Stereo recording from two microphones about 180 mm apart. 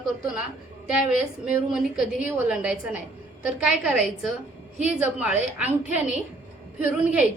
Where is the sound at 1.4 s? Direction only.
5° right (ahead or behind).